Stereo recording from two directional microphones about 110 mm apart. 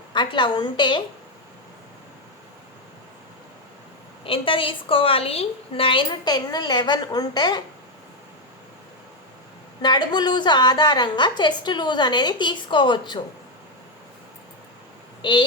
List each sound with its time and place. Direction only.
0.1 s a woman's voice: 45° left (ahead or behind)
4.2 s a woman's voice: 55° left (ahead or behind)
9.8 s a woman's voice: 40° left (ahead or behind)
15.2 s speech: 45° left (ahead or behind)